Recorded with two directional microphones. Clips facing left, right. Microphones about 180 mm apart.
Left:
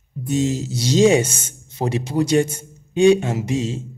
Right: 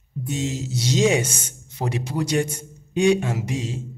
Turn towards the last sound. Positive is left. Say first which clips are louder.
# left 5 dB
turn(degrees=25)  # may be behind; listen again after turning